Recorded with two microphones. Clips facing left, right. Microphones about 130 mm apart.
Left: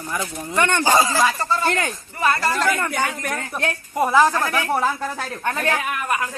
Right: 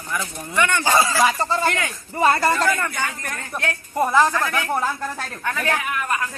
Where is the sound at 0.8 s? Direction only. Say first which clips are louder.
Left 2 dB; 15° left (ahead or behind).